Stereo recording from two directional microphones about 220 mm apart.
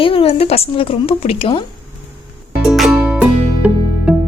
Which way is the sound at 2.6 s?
Centre (ahead or behind).